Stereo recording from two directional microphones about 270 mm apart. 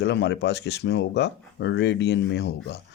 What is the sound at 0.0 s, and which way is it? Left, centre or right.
Speech, left.